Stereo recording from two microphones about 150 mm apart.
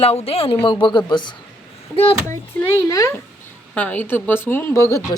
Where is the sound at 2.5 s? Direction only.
20° left (ahead or behind).